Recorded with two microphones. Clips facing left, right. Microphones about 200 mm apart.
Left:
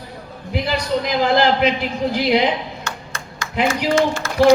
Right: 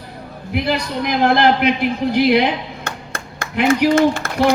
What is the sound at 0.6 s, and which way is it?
A man's voice, 60° right (ahead or behind).